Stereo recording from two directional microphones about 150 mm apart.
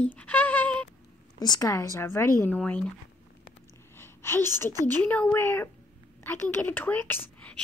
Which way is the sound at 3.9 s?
15° left (ahead or behind).